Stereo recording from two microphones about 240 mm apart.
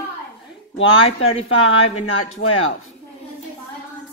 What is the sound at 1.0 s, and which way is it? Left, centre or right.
Speech, left.